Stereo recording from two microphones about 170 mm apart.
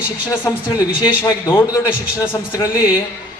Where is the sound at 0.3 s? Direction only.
20° left (ahead or behind).